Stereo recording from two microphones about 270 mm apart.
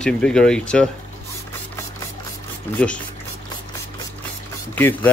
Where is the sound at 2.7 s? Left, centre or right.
Centre.